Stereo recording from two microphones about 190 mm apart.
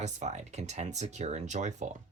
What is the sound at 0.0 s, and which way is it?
Speech, 35° right (ahead or behind).